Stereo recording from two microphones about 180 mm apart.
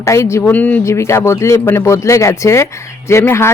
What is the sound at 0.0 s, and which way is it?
Speech, 15° left (ahead or behind).